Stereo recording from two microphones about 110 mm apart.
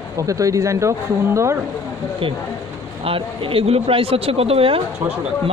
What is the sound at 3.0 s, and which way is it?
Speech, 55° right (ahead or behind).